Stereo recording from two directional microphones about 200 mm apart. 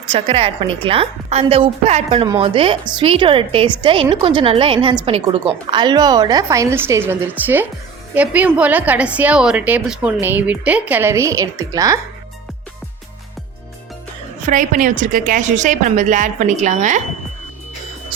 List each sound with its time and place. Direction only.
0.1 s a woman's voice: 30° right (ahead or behind)
14.5 s a woman's voice: 40° right (ahead or behind)